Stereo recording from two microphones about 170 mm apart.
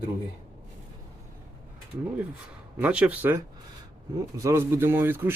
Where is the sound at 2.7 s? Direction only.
10° right (ahead or behind).